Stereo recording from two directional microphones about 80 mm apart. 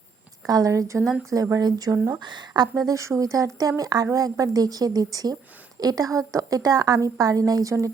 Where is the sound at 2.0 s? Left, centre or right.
Right.